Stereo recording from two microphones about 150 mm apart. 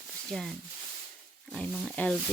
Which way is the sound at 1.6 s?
5° left (ahead or behind).